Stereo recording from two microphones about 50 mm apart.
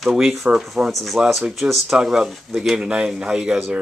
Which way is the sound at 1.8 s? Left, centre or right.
Centre.